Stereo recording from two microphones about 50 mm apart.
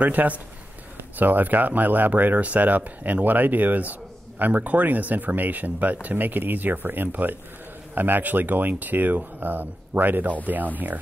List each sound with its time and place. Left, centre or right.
0.0 s speech: right